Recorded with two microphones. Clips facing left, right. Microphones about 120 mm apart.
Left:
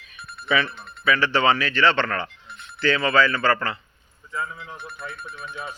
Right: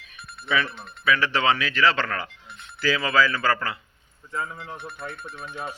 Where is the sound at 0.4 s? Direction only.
Centre (ahead or behind).